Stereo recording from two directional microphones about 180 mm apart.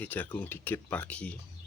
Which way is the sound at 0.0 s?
10° left (ahead or behind).